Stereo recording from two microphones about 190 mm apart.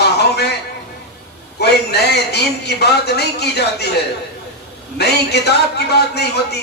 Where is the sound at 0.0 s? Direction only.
60° left (ahead or behind).